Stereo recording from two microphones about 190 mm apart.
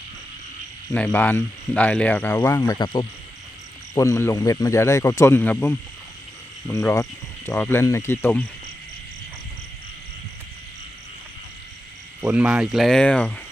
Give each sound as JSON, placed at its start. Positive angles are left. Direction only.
{"t": 0.9, "sound": "speech", "side_deg": 10}
{"t": 2.6, "sound": "speech", "side_deg": 25}
{"t": 12.2, "sound": "speech", "side_deg": -5}